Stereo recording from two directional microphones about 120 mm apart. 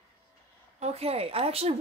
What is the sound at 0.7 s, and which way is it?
Speech, 60° right (ahead or behind).